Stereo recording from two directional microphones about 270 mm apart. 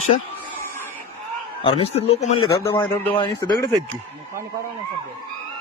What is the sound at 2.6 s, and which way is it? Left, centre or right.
A man's voice, centre.